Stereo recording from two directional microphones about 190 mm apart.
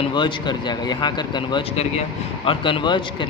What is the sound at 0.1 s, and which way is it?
Speech, 25° left (ahead or behind).